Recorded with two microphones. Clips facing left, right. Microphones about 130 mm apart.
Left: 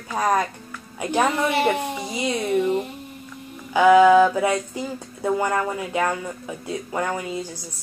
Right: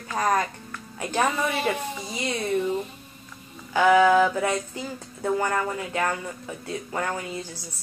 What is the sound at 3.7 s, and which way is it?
Speech, 10° left (ahead or behind).